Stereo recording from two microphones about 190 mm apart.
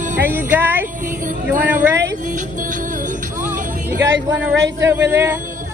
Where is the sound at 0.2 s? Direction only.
10° right (ahead or behind).